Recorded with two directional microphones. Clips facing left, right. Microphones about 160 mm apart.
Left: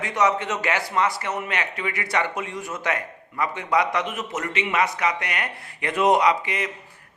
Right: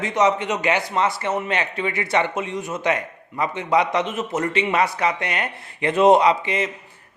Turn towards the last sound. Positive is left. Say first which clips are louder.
# right 3 dB
turn(degrees=-25)  # may be behind; listen again after turning